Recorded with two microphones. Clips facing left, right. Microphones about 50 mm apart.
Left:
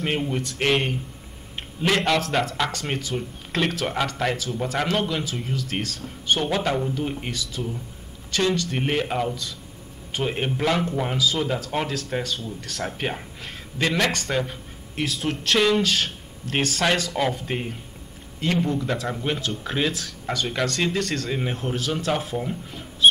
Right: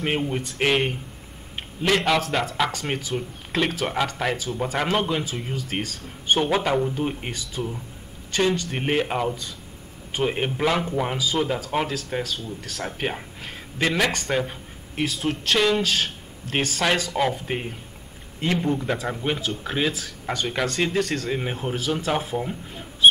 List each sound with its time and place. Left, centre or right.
0.0 s speech: centre
7.3 s speech: right; by 17.7 s centre
18.6 s speech: right
18.9 s speech: centre
22.7 s a sound: centre